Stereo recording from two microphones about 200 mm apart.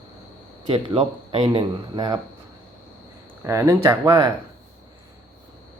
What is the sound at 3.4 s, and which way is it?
Speech, 15° right (ahead or behind).